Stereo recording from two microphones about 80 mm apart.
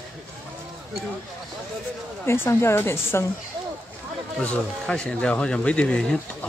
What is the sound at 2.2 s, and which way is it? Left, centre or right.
A woman's voice, left.